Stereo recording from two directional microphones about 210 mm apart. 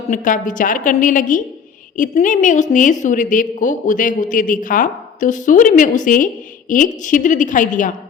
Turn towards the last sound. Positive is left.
turn(degrees=40)  # may be behind; listen again after turning